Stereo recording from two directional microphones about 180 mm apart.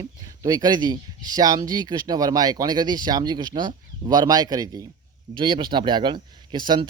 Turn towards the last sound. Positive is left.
turn(degrees=-25)  # may be behind; listen again after turning